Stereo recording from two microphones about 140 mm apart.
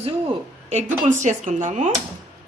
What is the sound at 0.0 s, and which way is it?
A woman's voice, 50° right (ahead or behind).